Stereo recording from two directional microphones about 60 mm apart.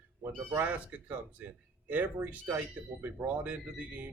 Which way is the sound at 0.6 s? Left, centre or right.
Right.